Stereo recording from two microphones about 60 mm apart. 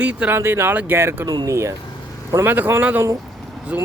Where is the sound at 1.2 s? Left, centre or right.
Right.